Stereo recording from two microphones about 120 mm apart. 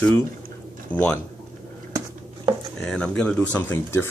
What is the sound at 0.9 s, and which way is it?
Speech, 15° left (ahead or behind).